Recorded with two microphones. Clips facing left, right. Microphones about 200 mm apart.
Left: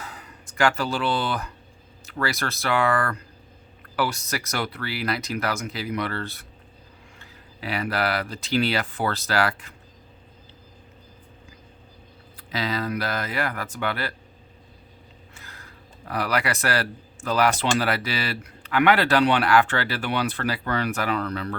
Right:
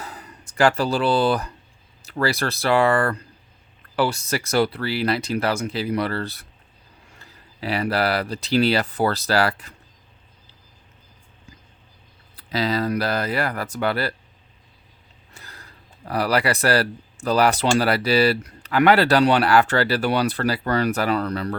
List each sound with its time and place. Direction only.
0.0 s speech: 35° right (ahead or behind)
7.6 s speech: 35° right (ahead or behind)
12.4 s speech: 35° right (ahead or behind)
15.4 s a sound: 35° right (ahead or behind)
16.0 s speech: 35° right (ahead or behind)